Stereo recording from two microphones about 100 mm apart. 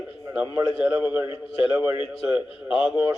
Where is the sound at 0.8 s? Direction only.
15° right (ahead or behind).